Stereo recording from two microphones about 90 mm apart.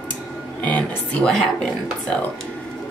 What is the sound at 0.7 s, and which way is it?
Speech, 15° left (ahead or behind).